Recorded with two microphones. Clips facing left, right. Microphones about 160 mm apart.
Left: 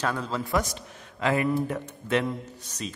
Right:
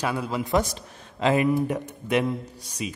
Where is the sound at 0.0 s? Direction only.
10° right (ahead or behind).